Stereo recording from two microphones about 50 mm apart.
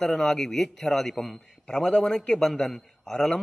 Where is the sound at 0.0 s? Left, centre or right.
Centre.